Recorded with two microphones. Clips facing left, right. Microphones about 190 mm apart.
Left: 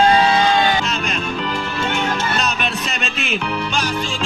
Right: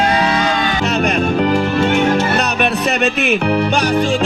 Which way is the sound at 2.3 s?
60° right (ahead or behind).